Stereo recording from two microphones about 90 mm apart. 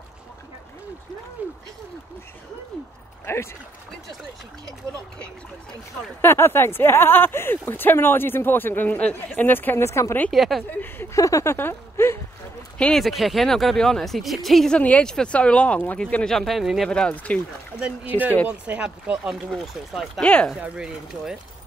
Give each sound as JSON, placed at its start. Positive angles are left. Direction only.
{"t": 1.4, "sound": "speech", "side_deg": -15}
{"t": 6.2, "sound": "speech", "side_deg": 25}
{"t": 10.3, "sound": "speech", "side_deg": 0}
{"t": 10.7, "sound": "speech", "side_deg": 20}
{"t": 11.1, "sound": "speech", "side_deg": 40}
{"t": 11.5, "sound": "a sound", "side_deg": 25}
{"t": 12.7, "sound": "speech", "side_deg": 10}
{"t": 13.0, "sound": "speech", "side_deg": 0}
{"t": 14.8, "sound": "speech", "side_deg": 15}
{"t": 16.9, "sound": "speech", "side_deg": 15}
{"t": 18.5, "sound": "speech", "side_deg": -15}
{"t": 19.3, "sound": "speech", "side_deg": 0}
{"t": 20.2, "sound": "speech", "side_deg": 10}
{"t": 20.6, "sound": "speech", "side_deg": -10}